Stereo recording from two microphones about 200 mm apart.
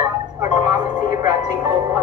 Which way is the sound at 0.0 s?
20° right (ahead or behind).